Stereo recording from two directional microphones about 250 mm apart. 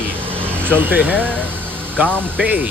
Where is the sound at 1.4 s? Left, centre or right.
Centre.